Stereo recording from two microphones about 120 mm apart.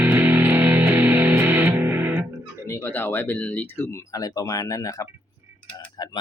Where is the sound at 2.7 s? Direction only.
20° left (ahead or behind).